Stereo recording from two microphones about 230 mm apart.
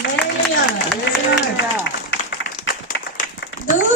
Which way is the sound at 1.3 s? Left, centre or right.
Left.